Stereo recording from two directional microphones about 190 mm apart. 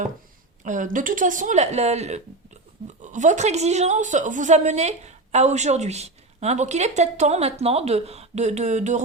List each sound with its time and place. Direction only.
0.6 s a woman's voice: 40° right (ahead or behind)